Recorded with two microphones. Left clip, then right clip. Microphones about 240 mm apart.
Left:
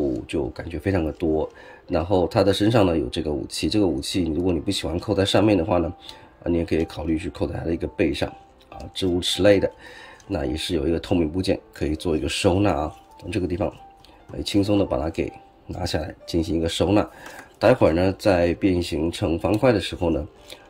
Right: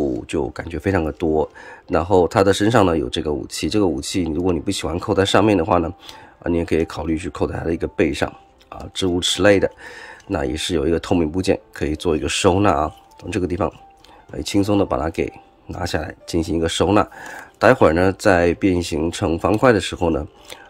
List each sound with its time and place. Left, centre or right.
0.3 s speech: centre